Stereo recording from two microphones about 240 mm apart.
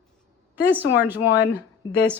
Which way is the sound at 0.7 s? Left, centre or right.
Centre.